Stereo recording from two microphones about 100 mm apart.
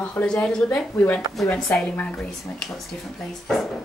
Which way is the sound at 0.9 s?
20° left (ahead or behind).